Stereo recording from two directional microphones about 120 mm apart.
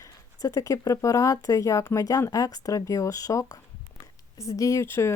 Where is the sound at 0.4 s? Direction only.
30° left (ahead or behind).